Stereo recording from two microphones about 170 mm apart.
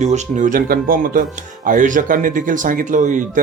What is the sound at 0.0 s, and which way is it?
Speech, 45° right (ahead or behind).